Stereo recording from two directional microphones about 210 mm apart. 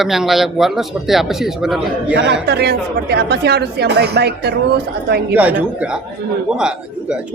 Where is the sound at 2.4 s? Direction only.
50° right (ahead or behind).